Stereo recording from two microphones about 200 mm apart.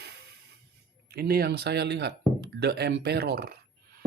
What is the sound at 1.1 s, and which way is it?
Speech, 50° right (ahead or behind).